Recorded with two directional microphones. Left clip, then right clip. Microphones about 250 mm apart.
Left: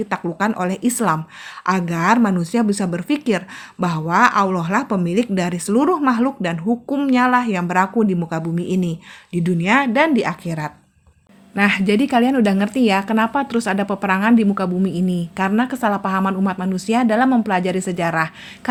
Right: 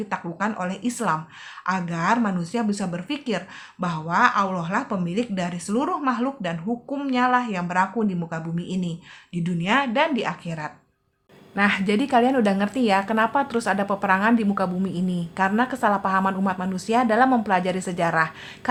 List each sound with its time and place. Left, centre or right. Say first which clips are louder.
0.1 s speech: left 4 dB; left
11.5 s a woman's voice: left 4 dB; left